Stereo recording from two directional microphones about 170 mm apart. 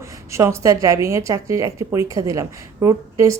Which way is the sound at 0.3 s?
15° right (ahead or behind).